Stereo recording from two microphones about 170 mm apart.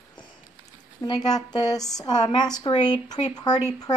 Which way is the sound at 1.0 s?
25° left (ahead or behind).